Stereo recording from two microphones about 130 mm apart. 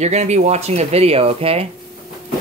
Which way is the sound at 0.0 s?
60° right (ahead or behind).